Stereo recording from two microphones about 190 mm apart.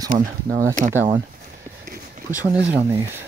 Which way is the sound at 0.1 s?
40° right (ahead or behind).